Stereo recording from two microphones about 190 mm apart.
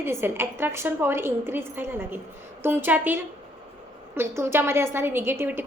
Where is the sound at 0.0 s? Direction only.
15° right (ahead or behind).